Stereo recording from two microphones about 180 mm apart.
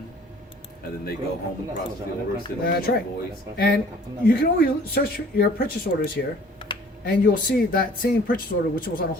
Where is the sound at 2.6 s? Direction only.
55° left (ahead or behind).